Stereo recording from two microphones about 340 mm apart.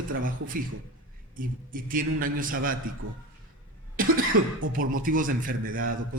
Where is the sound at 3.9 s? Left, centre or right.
Right.